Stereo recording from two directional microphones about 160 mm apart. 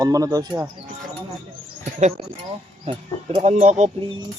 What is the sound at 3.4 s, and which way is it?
Speech, 45° right (ahead or behind).